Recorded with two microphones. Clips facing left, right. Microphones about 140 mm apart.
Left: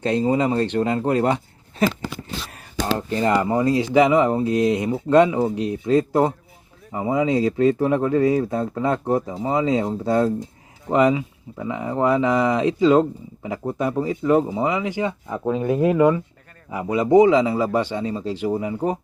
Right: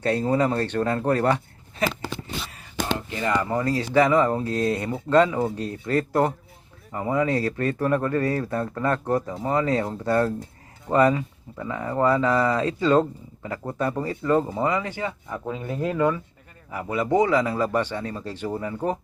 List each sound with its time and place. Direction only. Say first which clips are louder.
0.0 s speech: left 2 dB; 20° left (ahead or behind)
2.5 s a sound: left 4 dB; 40° left (ahead or behind)
3.4 s speech: left 5 dB; 15° left (ahead or behind)